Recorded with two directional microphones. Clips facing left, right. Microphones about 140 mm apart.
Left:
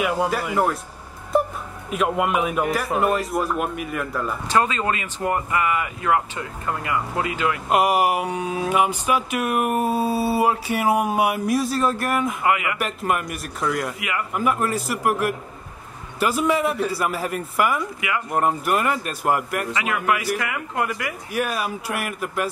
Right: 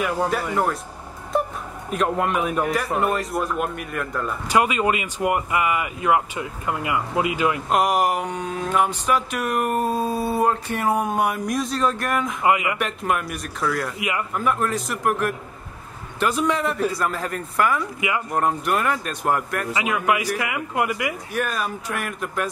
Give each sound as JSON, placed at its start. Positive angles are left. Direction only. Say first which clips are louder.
{"t": 0.0, "sound": "speech", "louder": "left 1 dB", "side_deg": 5}
{"t": 1.9, "sound": "speech", "louder": "left 1 dB", "side_deg": 5}
{"t": 4.5, "sound": "speech", "louder": "right 2 dB", "side_deg": -15}
{"t": 7.7, "sound": "speech", "louder": "left 3 dB", "side_deg": 5}
{"t": 12.4, "sound": "a man's voice", "louder": "right 3 dB", "side_deg": -20}
{"t": 12.7, "sound": "speech", "louder": "even", "side_deg": 0}
{"t": 13.9, "sound": "a man's voice", "louder": "right 2 dB", "side_deg": -20}
{"t": 14.3, "sound": "speech", "louder": "left 2 dB", "side_deg": 5}
{"t": 19.7, "sound": "speech", "louder": "right 2 dB", "side_deg": -15}
{"t": 21.3, "sound": "speech", "louder": "left 5 dB", "side_deg": 10}